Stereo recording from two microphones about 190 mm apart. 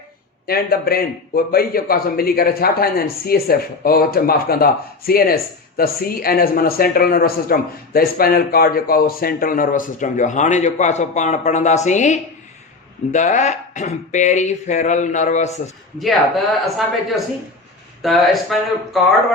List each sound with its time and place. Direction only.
0.4 s speech: 55° left (ahead or behind)
16.0 s speech: centre (ahead or behind)